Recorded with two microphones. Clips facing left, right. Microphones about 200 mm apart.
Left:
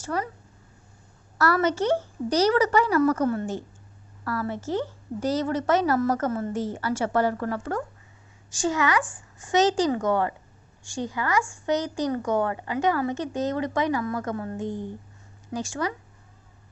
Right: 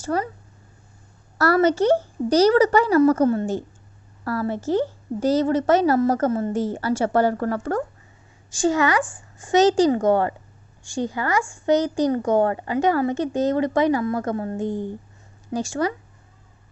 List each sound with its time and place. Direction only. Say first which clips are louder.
0.0 s speech: right 5 dB; 35° right (ahead or behind)
1.4 s a woman's voice: right 5 dB; 35° right (ahead or behind)
8.4 s a woman's voice: right 5 dB; 30° right (ahead or behind)